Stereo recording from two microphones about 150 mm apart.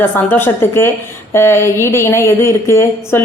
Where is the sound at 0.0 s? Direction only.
15° left (ahead or behind).